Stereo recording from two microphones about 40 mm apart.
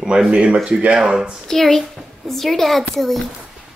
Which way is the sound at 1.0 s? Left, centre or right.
Centre.